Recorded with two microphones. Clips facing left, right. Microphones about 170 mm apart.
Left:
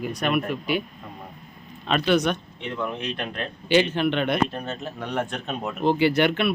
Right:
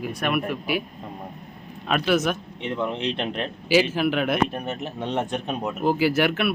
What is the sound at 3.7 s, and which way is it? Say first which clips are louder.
Speech: even; 5° right (ahead or behind).